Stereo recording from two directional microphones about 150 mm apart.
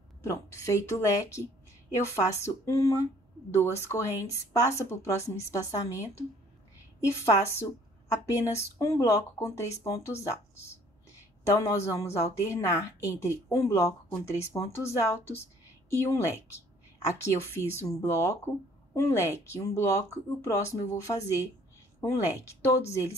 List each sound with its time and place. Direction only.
0.2 s a woman's voice: 20° left (ahead or behind)